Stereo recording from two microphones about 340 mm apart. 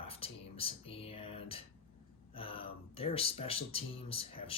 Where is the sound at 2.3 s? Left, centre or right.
Centre.